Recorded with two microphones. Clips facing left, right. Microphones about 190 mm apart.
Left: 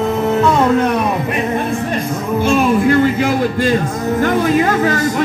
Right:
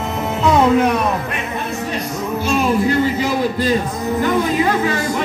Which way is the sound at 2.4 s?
55° left (ahead or behind).